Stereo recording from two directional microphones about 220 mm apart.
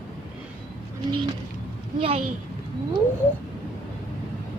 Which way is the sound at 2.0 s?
25° right (ahead or behind).